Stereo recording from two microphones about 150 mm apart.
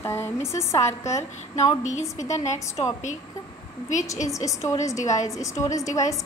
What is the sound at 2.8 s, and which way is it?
Speech, 40° left (ahead or behind).